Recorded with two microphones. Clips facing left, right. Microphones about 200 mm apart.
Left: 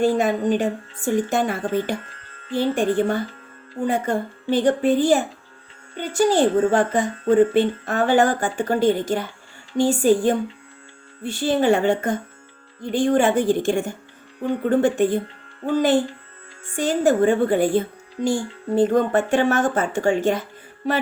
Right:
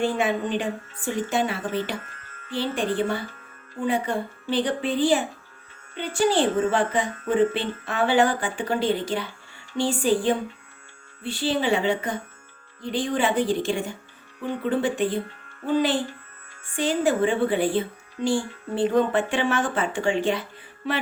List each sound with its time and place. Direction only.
0.0 s a woman's voice: 40° left (ahead or behind)
2.1 s music: 30° left (ahead or behind)
2.6 s a woman's voice: 45° left (ahead or behind)